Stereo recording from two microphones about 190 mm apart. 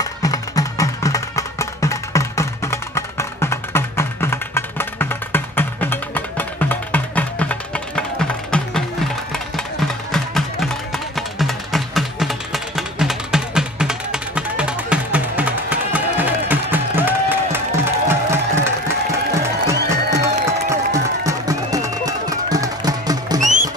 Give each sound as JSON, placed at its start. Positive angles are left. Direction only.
{"t": 0.0, "sound": "music", "side_deg": 20}
{"t": 19.9, "sound": "music", "side_deg": -15}
{"t": 23.4, "sound": "music", "side_deg": -40}